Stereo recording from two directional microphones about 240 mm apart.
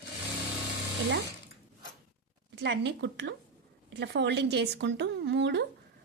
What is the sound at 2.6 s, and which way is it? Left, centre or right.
A woman's voice, right.